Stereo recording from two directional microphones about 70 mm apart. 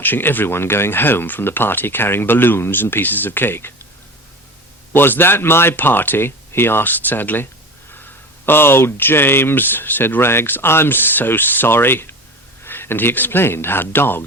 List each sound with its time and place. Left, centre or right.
0.0 s speech: left
4.9 s speech: left